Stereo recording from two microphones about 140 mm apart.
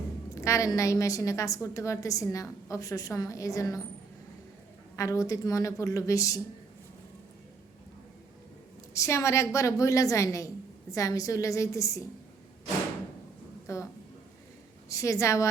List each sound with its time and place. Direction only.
0.3 s a woman's voice: 20° left (ahead or behind)
4.9 s a woman's voice: 25° left (ahead or behind)
8.9 s a woman's voice: 20° left (ahead or behind)
13.7 s a woman's voice: 20° left (ahead or behind)
14.8 s a woman's voice: 25° left (ahead or behind)